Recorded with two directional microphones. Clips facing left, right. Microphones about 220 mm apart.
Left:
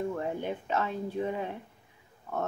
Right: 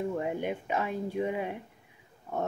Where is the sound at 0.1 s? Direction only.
15° right (ahead or behind).